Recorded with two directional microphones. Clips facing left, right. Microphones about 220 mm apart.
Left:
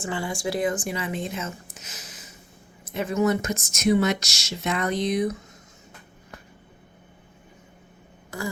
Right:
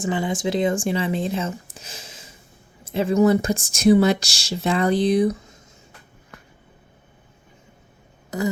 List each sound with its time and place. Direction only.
0.0 s speech: 20° right (ahead or behind)